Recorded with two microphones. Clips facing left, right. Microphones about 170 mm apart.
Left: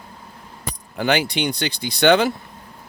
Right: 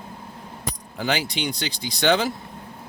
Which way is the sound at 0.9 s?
65° left (ahead or behind).